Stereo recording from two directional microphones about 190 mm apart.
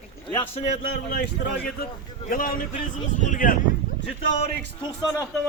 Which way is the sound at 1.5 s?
50° left (ahead or behind).